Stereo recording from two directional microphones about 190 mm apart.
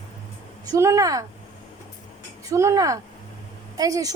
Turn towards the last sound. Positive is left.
turn(degrees=-20)  # may be behind; listen again after turning